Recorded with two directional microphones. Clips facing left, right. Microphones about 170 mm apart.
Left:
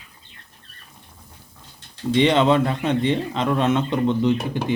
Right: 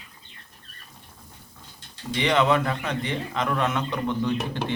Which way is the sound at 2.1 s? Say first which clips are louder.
Left 5 dB; 25° left (ahead or behind).